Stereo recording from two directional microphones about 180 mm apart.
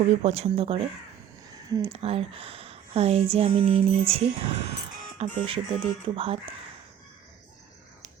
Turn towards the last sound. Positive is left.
turn(degrees=-30)  # may be behind; listen again after turning